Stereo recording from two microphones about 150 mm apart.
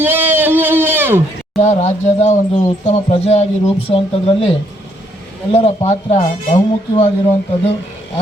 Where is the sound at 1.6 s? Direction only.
45° left (ahead or behind).